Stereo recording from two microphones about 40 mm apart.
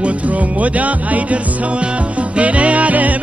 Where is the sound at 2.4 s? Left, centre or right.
Right.